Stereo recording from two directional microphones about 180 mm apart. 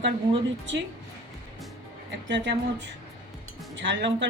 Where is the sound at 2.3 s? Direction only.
80° right.